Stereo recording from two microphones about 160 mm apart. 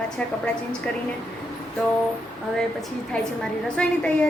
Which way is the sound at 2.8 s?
5° left (ahead or behind).